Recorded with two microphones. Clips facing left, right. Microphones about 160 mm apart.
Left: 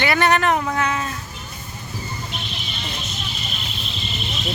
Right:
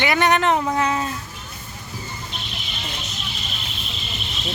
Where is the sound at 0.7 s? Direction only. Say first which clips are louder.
Right 1 dB; 30° right (ahead or behind).